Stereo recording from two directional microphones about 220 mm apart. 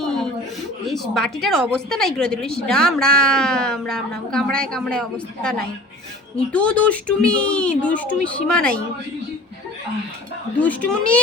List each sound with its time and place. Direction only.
0.0 s chuckle: centre (ahead or behind)
1.1 s a woman's voice: centre (ahead or behind)
10.6 s a woman's voice: 5° left (ahead or behind)